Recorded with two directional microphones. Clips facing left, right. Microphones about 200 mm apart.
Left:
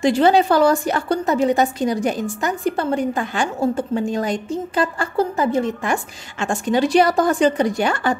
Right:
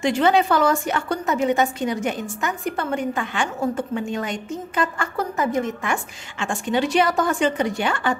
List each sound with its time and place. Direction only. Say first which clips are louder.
0.0 s a woman's voice: left 3 dB; 35° left (ahead or behind)